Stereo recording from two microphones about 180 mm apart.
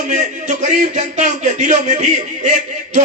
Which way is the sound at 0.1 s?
45° right (ahead or behind).